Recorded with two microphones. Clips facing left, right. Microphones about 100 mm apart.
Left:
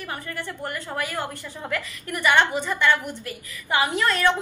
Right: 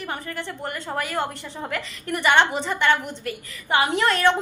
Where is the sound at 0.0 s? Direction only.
20° right (ahead or behind).